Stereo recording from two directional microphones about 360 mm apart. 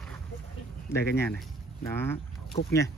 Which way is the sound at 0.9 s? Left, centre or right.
Centre.